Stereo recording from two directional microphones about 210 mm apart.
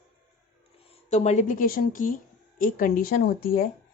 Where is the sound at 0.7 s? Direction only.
30° left (ahead or behind); by 3.6 s 45° left (ahead or behind).